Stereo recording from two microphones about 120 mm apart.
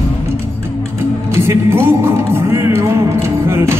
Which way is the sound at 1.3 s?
20° right (ahead or behind).